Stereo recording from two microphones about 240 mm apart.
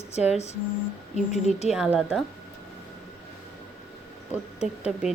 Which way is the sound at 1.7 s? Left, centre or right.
Centre.